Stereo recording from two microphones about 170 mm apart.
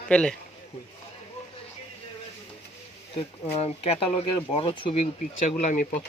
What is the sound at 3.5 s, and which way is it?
Speech, 35° left (ahead or behind).